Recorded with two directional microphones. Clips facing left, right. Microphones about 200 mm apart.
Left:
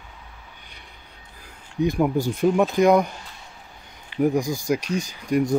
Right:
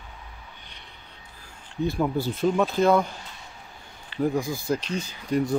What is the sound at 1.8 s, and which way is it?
Speech, 15° left (ahead or behind).